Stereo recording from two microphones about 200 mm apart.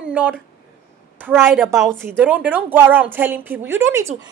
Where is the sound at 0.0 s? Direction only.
5° right (ahead or behind).